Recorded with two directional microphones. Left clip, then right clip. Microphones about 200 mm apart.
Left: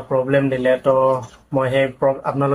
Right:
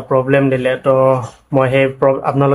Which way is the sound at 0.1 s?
40° right (ahead or behind).